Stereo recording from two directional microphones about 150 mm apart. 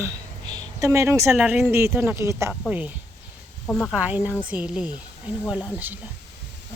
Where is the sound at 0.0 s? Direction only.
20° right (ahead or behind).